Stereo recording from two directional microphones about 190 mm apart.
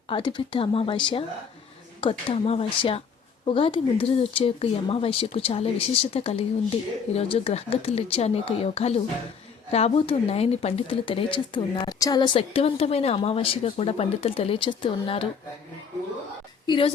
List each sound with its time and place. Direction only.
0.1 s speech: 25° left (ahead or behind)
16.6 s speech: 25° left (ahead or behind)